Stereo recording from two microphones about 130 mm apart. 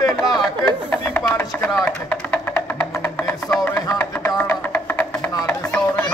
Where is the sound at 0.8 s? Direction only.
15° left (ahead or behind).